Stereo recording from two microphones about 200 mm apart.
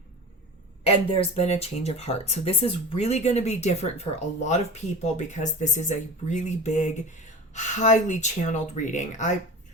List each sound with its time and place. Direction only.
0.9 s speech: 30° left (ahead or behind)